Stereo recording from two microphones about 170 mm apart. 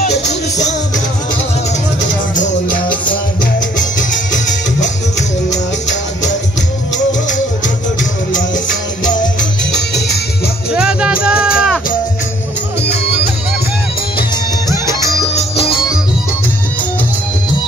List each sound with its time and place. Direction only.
5.5 s music: 45° left (ahead or behind)
10.7 s music: 5° right (ahead or behind)
14.1 s music: 25° left (ahead or behind)
15.3 s music: 35° left (ahead or behind)